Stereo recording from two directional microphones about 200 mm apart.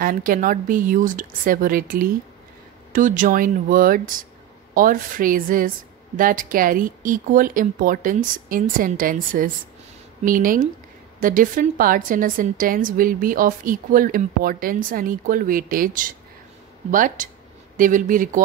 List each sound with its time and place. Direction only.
0.0 s a woman's voice: 45° right (ahead or behind)